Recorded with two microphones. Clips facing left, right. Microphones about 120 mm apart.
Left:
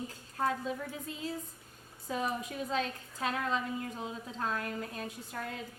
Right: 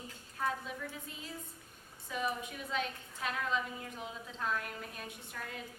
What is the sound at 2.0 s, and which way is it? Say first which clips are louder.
A woman's voice: left 3 dB; 35° left (ahead or behind).